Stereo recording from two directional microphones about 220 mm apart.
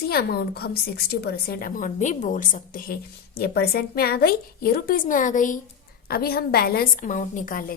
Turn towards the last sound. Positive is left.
turn(degrees=40)  # may be behind; listen again after turning